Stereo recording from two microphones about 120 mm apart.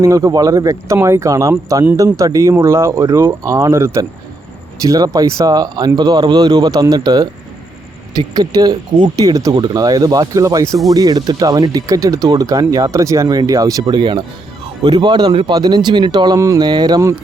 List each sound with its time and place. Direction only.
0.0 s speech: 25° right (ahead or behind)